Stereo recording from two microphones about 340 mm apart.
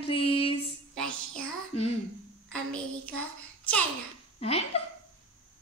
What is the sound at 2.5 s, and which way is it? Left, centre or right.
A child's voice, centre.